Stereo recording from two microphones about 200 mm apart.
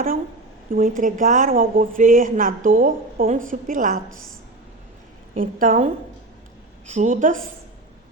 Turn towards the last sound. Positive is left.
turn(degrees=-40)  # may be behind; listen again after turning